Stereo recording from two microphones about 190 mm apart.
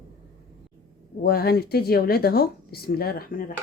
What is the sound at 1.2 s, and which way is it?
Speech, 55° left (ahead or behind).